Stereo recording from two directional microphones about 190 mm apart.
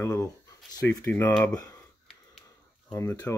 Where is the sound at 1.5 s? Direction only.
15° left (ahead or behind).